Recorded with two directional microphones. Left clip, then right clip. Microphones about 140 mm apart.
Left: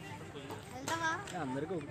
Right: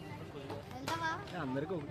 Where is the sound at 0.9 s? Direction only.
35° left (ahead or behind).